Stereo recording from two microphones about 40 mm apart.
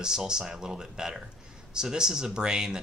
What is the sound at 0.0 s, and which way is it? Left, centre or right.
Speech, centre.